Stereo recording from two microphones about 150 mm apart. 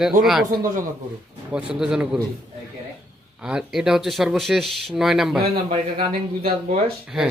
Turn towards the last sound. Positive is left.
turn(degrees=-5)  # may be behind; listen again after turning